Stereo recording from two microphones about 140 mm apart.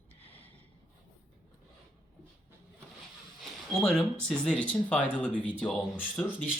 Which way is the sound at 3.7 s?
5° left (ahead or behind).